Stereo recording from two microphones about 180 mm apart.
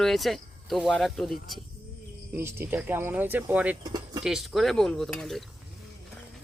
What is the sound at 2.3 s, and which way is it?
Speech, 15° right (ahead or behind).